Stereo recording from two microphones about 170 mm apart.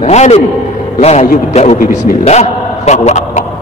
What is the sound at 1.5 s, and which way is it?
A man's voice, 40° left (ahead or behind).